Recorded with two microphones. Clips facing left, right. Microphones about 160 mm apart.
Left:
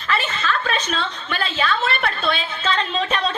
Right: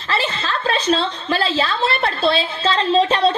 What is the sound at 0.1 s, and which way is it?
A woman's voice, 30° right (ahead or behind).